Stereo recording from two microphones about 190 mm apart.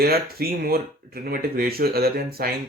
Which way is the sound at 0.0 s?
55° right (ahead or behind).